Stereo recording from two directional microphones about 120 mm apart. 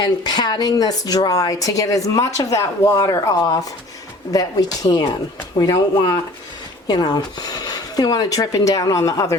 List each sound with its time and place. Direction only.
0.0 s a woman's voice: 35° left (ahead or behind)